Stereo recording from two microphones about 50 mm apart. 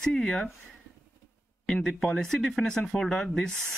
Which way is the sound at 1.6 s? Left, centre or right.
Centre.